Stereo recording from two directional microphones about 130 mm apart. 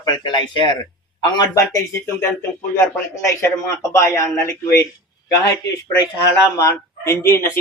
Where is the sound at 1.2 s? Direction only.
25° left (ahead or behind).